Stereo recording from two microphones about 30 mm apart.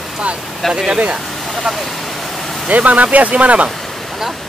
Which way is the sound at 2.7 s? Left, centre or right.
Right.